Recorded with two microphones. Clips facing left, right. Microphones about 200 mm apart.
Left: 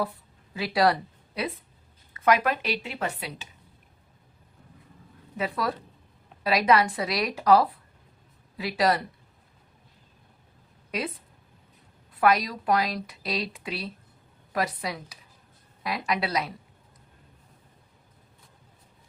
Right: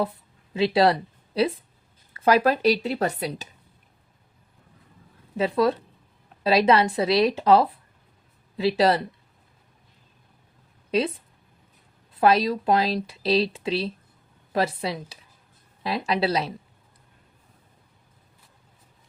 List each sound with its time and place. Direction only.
0.5 s speech: 25° right (ahead or behind)
5.4 s speech: 25° right (ahead or behind)
10.9 s speech: 30° right (ahead or behind)
12.2 s speech: 25° right (ahead or behind)